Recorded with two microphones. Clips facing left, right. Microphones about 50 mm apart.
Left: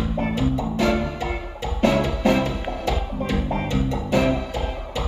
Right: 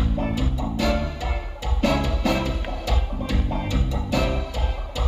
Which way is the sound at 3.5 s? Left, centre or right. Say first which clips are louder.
Left 4 dB; left.